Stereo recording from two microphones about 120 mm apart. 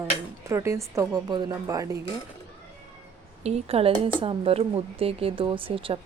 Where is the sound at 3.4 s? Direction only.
60° right (ahead or behind).